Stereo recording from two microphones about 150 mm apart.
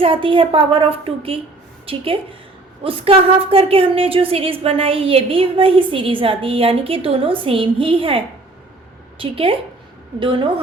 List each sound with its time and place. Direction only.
0.0 s a woman's voice: 35° right (ahead or behind)